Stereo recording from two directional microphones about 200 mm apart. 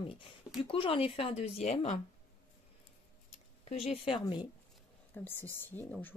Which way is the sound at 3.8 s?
30° left (ahead or behind).